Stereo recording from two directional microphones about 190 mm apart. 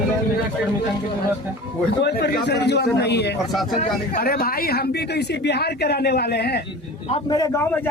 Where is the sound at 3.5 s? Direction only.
Centre (ahead or behind).